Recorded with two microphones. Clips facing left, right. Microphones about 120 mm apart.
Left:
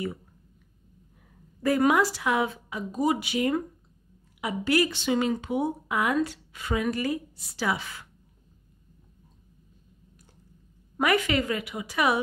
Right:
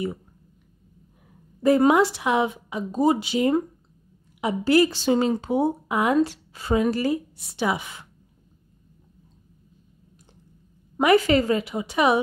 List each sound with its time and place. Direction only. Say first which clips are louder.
1.6 s a woman's voice: right 5 dB; 25° right (ahead or behind)
11.0 s a woman's voice: right 6 dB; 30° right (ahead or behind)